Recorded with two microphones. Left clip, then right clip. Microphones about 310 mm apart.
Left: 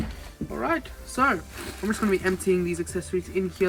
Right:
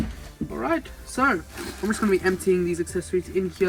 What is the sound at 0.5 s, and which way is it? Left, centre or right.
Speech, centre.